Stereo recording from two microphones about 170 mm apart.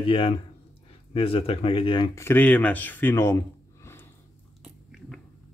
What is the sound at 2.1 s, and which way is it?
Speech, 10° left (ahead or behind).